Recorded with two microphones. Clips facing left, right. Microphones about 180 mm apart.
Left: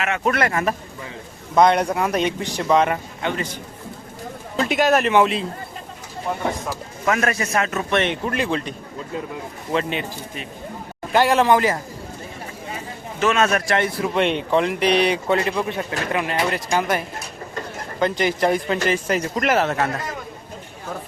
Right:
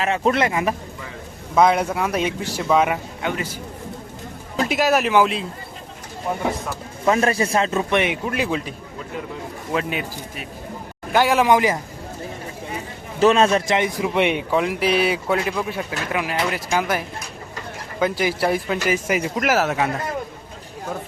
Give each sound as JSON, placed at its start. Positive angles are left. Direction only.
{"t": 0.0, "sound": "speech", "side_deg": -25}
{"t": 1.5, "sound": "speech", "side_deg": -5}
{"t": 7.0, "sound": "a man's voice", "side_deg": -30}
{"t": 9.7, "sound": "speech", "side_deg": -5}
{"t": 11.4, "sound": "a man's voice", "side_deg": -15}
{"t": 13.1, "sound": "speech", "side_deg": -30}
{"t": 18.0, "sound": "a man's voice", "side_deg": -5}